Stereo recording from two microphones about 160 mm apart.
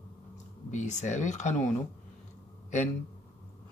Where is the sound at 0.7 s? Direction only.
50° left (ahead or behind).